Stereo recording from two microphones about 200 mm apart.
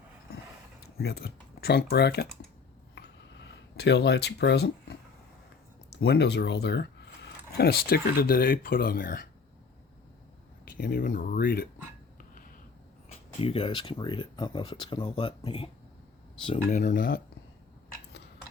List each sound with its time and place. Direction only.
0.9 s speech: 50° left (ahead or behind)
3.8 s speech: 55° left (ahead or behind)
10.7 s speech: 45° left (ahead or behind)
13.4 s speech: 25° left (ahead or behind); by 17.2 s 45° left (ahead or behind)